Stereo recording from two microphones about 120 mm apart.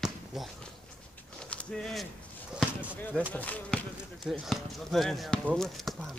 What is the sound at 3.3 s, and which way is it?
Speech, 10° left (ahead or behind).